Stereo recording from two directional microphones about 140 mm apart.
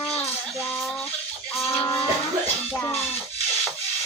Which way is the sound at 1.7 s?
15° left (ahead or behind).